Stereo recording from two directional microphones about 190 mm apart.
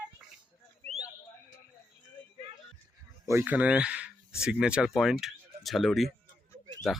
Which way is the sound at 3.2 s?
10° right (ahead or behind).